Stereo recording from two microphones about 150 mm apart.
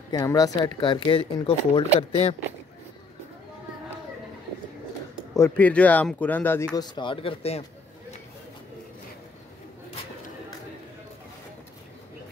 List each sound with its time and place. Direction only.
0.1 s speech: 25° left (ahead or behind); by 2.3 s 40° left (ahead or behind)
5.3 s speech: 15° left (ahead or behind)
6.7 s speech: 30° left (ahead or behind)